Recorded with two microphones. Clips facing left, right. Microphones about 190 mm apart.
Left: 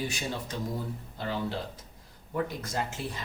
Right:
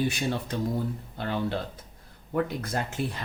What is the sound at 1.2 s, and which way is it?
Speech, 60° right (ahead or behind).